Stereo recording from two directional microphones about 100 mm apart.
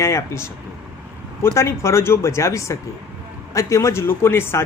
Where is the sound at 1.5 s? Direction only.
30° left (ahead or behind).